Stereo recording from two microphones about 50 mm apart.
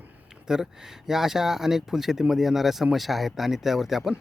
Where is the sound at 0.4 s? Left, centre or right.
Centre.